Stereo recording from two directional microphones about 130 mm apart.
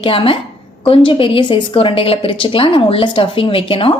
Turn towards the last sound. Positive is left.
turn(degrees=45)  # may be behind; listen again after turning